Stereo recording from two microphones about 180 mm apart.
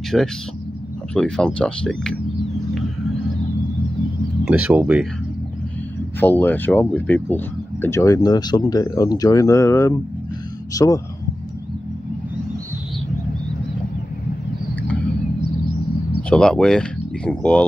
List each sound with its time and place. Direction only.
0.1 s speech: centre (ahead or behind)
4.5 s speech: 5° right (ahead or behind)
6.1 s speech: 10° left (ahead or behind)
16.3 s speech: 5° left (ahead or behind)